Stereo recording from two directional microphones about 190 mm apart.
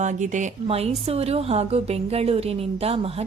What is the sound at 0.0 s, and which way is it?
A woman's voice, 40° right (ahead or behind).